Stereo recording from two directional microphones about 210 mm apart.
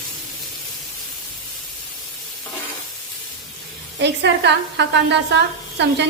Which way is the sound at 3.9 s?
55° right (ahead or behind).